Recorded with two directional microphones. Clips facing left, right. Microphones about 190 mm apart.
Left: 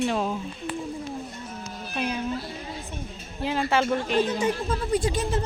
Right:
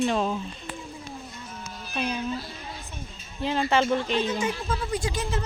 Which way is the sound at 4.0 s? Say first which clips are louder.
Left 2 dB; 50° left (ahead or behind).